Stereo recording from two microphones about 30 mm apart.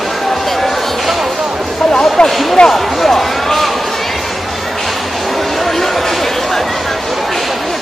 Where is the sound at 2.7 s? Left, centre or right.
Centre.